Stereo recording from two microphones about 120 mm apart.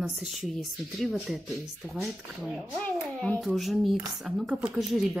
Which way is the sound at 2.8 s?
15° left (ahead or behind).